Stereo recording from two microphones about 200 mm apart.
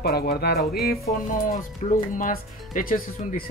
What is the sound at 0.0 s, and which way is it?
Speech, 50° left (ahead or behind).